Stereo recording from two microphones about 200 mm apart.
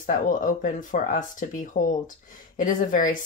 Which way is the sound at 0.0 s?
40° left (ahead or behind).